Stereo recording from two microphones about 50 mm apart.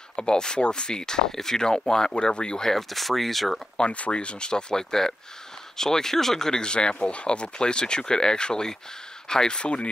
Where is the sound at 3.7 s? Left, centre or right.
Left.